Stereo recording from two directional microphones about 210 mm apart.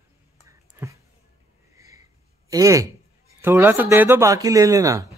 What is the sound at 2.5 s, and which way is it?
Speech, 15° right (ahead or behind).